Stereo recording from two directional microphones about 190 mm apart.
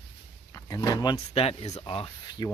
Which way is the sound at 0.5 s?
20° left (ahead or behind).